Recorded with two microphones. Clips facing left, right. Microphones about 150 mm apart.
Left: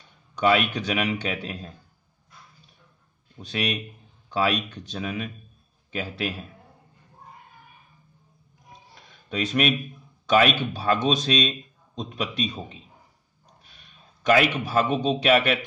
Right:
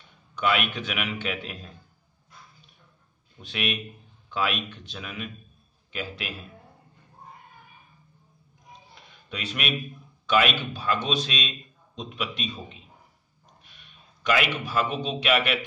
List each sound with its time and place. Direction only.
0.4 s a man's voice: 40° left (ahead or behind)
3.3 s a man's voice: 40° left (ahead or behind)
8.9 s a sound: 45° left (ahead or behind)
10.2 s a man's voice: 40° left (ahead or behind)